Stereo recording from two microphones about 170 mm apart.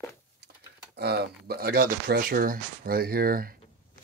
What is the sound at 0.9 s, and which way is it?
Speech, 70° right (ahead or behind).